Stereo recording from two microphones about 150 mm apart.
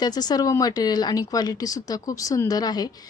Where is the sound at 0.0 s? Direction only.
25° left (ahead or behind).